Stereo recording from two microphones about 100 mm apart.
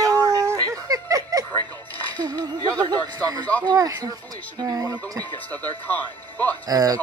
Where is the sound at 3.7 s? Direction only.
40° right (ahead or behind).